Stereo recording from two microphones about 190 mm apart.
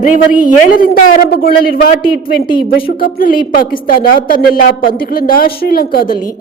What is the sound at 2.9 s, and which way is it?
A woman's voice, 50° left (ahead or behind).